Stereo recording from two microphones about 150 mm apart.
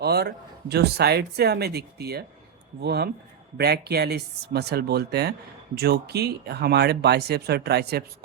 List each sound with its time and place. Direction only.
0.0 s speech: 90° right